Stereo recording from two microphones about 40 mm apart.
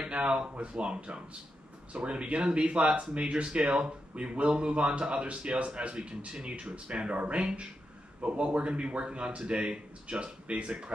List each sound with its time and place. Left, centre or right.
0.0 s speech: right